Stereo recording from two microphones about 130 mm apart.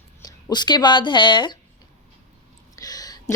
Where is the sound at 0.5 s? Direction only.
35° left (ahead or behind).